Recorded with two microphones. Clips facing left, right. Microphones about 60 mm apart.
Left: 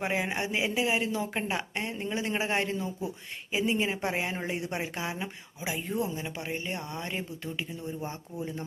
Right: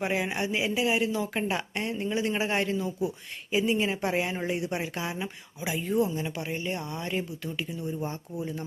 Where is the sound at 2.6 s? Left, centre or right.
Left.